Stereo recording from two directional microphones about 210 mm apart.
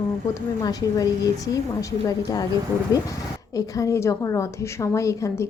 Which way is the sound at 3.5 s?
15° left (ahead or behind).